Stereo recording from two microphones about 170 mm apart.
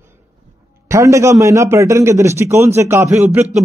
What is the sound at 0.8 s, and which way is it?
A man's voice, 20° right (ahead or behind).